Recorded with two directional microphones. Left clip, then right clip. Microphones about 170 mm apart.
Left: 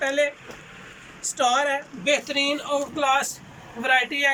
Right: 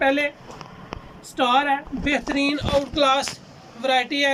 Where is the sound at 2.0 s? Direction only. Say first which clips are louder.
Left 1 dB; 45° right (ahead or behind).